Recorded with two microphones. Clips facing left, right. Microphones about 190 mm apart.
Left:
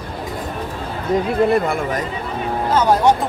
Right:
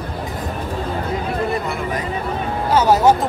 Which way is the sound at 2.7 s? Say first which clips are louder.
Right 1 dB; 5° right (ahead or behind).